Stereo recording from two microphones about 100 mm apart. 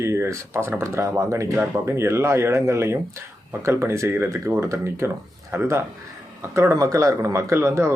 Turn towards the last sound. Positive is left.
turn(degrees=-25)  # may be behind; listen again after turning